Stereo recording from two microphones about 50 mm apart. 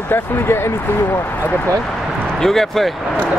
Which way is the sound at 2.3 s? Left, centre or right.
Centre.